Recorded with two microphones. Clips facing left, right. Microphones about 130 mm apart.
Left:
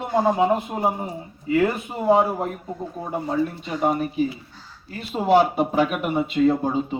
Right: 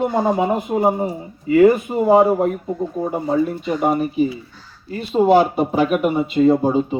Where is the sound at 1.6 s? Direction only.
10° right (ahead or behind).